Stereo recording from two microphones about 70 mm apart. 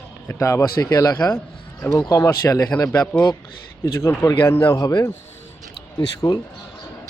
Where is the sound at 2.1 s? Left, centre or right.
Left.